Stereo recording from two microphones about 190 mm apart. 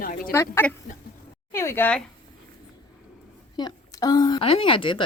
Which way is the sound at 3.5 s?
20° left (ahead or behind).